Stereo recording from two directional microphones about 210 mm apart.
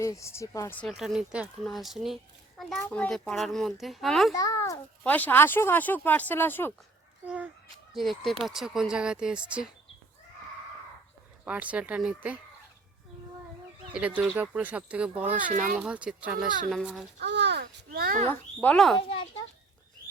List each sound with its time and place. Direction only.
0.0 s speech: 15° left (ahead or behind)
4.4 s a child's voice: 15° left (ahead or behind)
7.9 s speech: centre (ahead or behind)
11.4 s speech: 5° right (ahead or behind)
14.2 s speech: 5° right (ahead or behind)
15.4 s speech: 40° right (ahead or behind)
15.8 s speech: 5° right (ahead or behind)
17.2 s a child's voice: 55° right (ahead or behind)
18.6 s speech: 5° left (ahead or behind)